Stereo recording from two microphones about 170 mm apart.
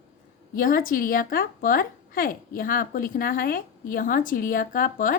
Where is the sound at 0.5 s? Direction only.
55° left (ahead or behind).